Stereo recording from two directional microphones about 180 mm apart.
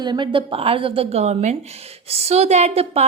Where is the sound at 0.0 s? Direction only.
25° right (ahead or behind).